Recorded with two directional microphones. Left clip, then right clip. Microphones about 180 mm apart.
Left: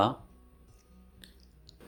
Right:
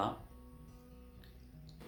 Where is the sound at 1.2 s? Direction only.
40° left (ahead or behind).